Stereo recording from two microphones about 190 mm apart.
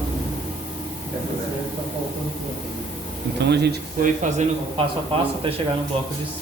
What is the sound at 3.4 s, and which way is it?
Speech, 60° right (ahead or behind).